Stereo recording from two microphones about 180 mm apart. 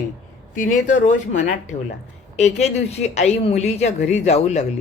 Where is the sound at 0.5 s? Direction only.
45° left (ahead or behind).